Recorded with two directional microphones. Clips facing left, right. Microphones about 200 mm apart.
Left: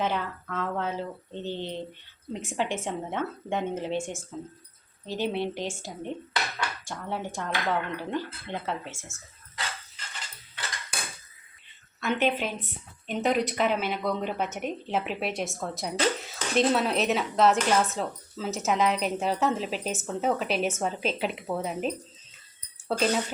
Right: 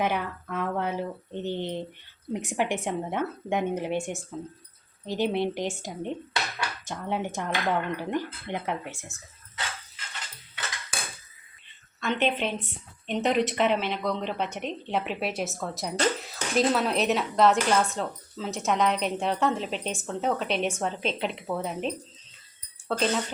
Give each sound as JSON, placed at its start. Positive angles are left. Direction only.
{"t": 0.0, "sound": "speech", "side_deg": -15}
{"t": 12.2, "sound": "speech", "side_deg": 5}